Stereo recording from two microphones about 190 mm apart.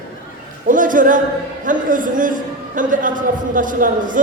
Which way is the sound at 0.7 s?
45° right (ahead or behind).